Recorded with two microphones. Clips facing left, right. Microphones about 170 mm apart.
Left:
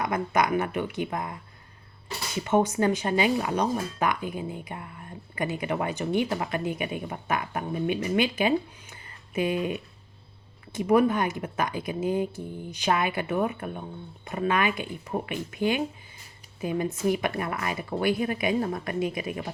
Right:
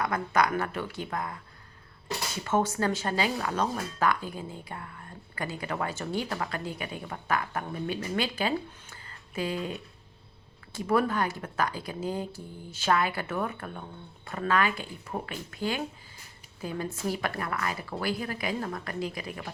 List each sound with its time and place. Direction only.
0.0 s speech: 20° left (ahead or behind)